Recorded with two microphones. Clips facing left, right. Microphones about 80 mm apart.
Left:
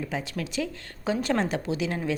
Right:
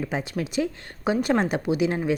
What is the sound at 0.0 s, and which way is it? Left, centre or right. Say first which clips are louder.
A woman's voice: right 3 dB; right.